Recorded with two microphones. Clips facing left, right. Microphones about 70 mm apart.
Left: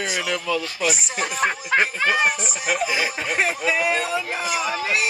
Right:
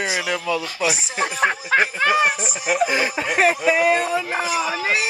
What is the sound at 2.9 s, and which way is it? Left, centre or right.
Speech, right.